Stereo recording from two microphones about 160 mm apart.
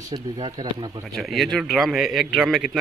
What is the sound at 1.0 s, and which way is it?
Speech, centre (ahead or behind).